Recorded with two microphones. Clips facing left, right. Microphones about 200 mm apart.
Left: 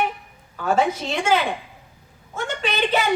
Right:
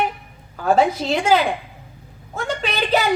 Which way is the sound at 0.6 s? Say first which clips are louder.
Right 4 dB; 35° right (ahead or behind).